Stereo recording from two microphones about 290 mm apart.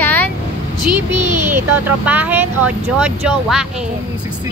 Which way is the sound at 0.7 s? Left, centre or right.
Right.